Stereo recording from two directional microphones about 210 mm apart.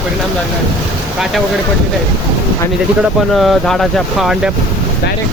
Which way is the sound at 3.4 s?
Centre (ahead or behind).